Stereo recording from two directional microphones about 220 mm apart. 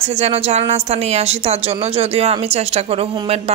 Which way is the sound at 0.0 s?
30° right (ahead or behind).